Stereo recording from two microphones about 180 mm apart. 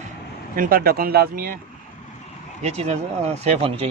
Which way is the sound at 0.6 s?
55° right (ahead or behind).